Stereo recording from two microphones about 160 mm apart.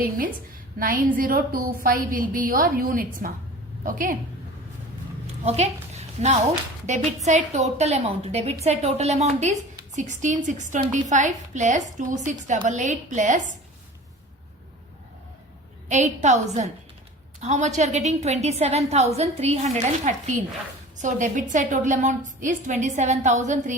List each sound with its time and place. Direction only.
0.8 s a woman's voice: 60° right (ahead or behind)
5.5 s a woman's voice: 40° right (ahead or behind)
15.9 s a woman's voice: 50° right (ahead or behind)